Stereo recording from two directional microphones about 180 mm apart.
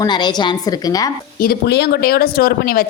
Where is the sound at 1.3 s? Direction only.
60° left (ahead or behind).